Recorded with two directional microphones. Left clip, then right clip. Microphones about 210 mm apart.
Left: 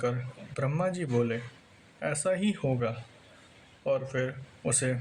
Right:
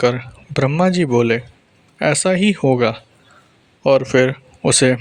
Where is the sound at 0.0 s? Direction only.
40° right (ahead or behind).